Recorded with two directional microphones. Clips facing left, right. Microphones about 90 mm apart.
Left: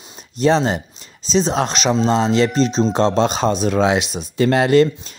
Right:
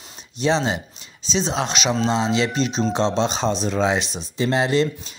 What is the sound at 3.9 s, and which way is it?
Speech, 10° left (ahead or behind).